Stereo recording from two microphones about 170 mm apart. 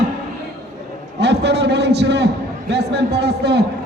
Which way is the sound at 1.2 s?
80° right.